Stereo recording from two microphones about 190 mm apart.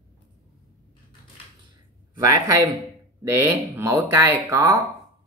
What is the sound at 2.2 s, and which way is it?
Speech, 15° right (ahead or behind).